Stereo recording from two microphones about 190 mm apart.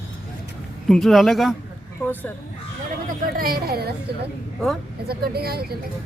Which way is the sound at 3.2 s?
50° right (ahead or behind).